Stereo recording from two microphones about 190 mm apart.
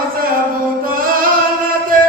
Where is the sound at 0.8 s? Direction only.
50° right (ahead or behind).